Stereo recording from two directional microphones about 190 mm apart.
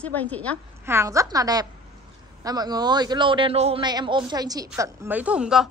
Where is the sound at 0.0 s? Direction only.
10° left (ahead or behind).